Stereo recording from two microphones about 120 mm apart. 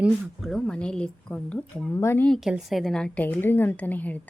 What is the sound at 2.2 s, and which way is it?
A woman's voice, 5° left (ahead or behind).